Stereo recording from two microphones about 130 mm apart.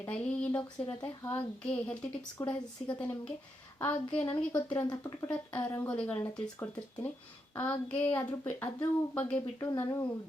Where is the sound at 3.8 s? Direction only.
15° left (ahead or behind).